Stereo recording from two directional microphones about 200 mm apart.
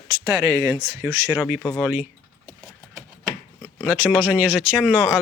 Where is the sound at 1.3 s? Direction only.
5° right (ahead or behind).